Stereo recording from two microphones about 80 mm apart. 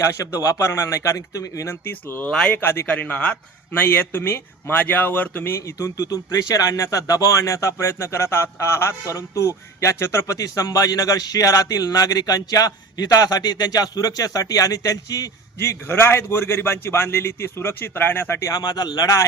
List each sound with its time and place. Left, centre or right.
0.1 s a man's voice: left
1.8 s a man's voice: left
2.2 s speech: centre
2.6 s a man's voice: left
2.8 s a man's voice: centre
5.8 s a man's voice: left
18.3 s a man's voice: left